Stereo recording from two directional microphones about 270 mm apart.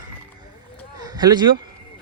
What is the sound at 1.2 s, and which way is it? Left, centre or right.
Speech, centre.